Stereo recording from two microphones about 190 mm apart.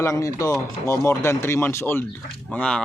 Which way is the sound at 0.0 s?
15° left (ahead or behind).